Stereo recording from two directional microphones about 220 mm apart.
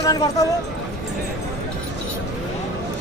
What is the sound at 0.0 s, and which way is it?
Speech, 15° left (ahead or behind).